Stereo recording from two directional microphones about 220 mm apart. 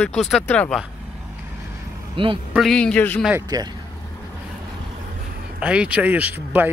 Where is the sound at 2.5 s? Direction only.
Centre (ahead or behind).